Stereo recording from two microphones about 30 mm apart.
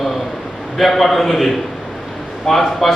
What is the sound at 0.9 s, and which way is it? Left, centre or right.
A man's voice, centre.